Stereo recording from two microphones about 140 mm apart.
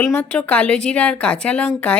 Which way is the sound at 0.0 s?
5° left (ahead or behind).